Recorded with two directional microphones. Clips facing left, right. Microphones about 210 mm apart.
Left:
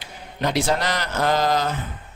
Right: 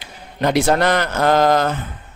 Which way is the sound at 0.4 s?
55° right (ahead or behind).